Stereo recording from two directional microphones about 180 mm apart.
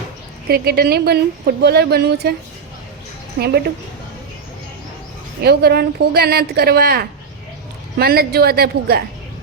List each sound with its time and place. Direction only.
0.4 s a woman's voice: 60° right (ahead or behind)
5.4 s a woman's voice: 60° right (ahead or behind)